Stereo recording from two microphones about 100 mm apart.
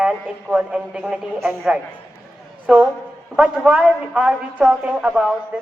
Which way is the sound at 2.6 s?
10° right (ahead or behind).